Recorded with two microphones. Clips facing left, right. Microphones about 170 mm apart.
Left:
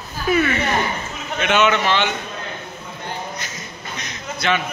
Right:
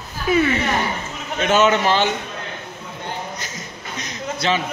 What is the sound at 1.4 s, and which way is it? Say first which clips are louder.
Speech: right 2 dB; 40° right (ahead or behind).